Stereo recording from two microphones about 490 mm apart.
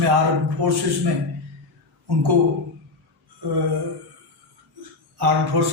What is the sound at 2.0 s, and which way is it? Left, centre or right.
Speech, right.